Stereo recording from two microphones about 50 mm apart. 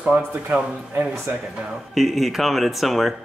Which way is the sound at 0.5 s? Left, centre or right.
Right.